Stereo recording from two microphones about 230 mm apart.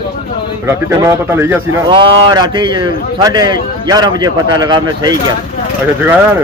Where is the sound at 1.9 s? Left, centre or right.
Right.